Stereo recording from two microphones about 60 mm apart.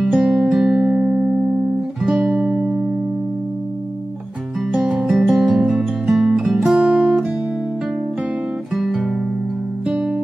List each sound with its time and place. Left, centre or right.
0.1 s music: centre
4.7 s music: centre
6.8 s music: right
8.7 s guitar: centre
9.8 s music: centre